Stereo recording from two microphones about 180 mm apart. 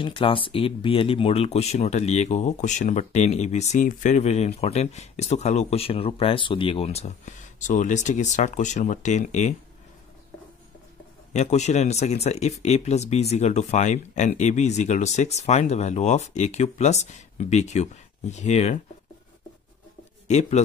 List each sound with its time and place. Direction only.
0.0 s speech: 30° left (ahead or behind)
11.3 s speech: 40° left (ahead or behind)
20.2 s speech: 40° left (ahead or behind)